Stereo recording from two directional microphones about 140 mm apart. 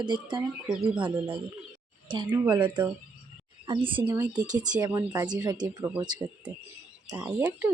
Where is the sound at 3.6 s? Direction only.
35° right (ahead or behind).